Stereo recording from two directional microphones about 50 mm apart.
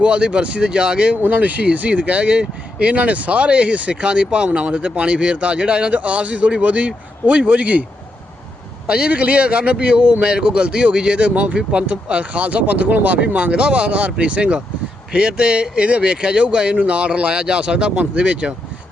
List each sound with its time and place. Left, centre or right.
0.0 s speech: right
1.2 s speech: right
8.9 s speech: right